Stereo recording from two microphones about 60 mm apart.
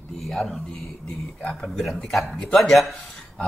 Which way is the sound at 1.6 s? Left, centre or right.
Centre.